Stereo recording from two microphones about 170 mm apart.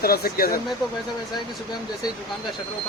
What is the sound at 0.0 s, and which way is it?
Speech, 65° left (ahead or behind).